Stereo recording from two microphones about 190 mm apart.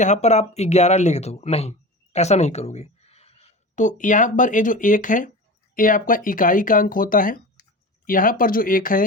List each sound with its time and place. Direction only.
0.0 s speech: 35° left (ahead or behind)